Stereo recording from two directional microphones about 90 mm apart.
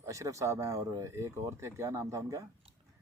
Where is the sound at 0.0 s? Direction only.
35° right (ahead or behind).